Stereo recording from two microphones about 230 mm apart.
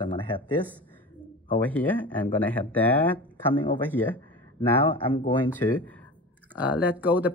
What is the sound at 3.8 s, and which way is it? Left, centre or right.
Speech, centre.